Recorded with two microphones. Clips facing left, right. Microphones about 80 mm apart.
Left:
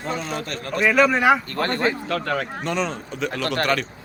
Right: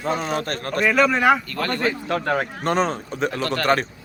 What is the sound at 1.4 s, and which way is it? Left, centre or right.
Speech, left.